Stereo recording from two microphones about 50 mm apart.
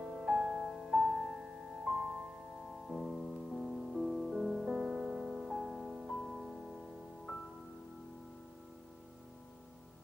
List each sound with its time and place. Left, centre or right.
0.0 s music: centre
2.9 s music: centre
4.7 s music: centre